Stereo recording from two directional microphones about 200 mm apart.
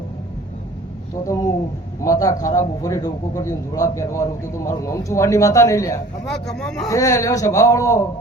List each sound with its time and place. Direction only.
2.0 s a man's voice: 15° left (ahead or behind)
6.2 s speech: centre (ahead or behind)
6.8 s a man's voice: 15° left (ahead or behind)